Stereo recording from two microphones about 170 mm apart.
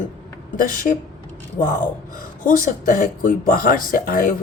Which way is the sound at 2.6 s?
50° left (ahead or behind).